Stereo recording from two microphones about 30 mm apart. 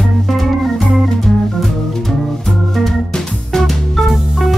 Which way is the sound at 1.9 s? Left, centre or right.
Centre.